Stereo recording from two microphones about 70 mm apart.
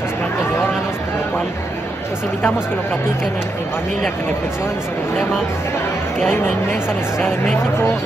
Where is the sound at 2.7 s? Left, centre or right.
Left.